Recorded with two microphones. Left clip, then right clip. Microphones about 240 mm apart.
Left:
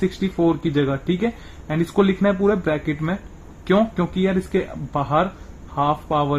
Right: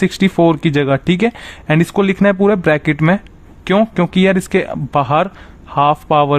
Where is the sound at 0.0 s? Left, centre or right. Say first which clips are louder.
Right 8 dB; right.